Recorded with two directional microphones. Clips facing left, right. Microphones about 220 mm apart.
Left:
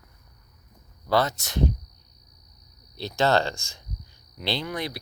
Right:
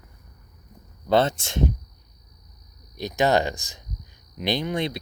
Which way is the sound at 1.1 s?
25° right (ahead or behind).